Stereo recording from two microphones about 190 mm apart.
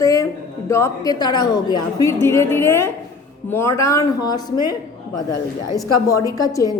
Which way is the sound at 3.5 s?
15° left (ahead or behind).